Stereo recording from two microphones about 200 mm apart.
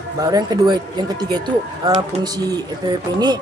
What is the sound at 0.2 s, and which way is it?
Speech, 20° right (ahead or behind).